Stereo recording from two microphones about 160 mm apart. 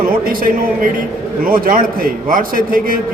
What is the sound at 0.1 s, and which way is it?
A man's voice, 65° right (ahead or behind).